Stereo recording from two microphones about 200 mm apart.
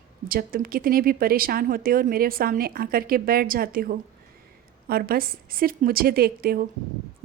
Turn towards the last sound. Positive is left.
turn(degrees=-50)  # may be behind; listen again after turning